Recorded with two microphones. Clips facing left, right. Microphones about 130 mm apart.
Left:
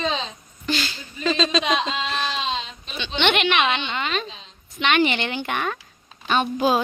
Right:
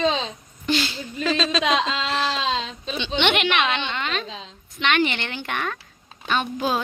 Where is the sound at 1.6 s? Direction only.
90° right.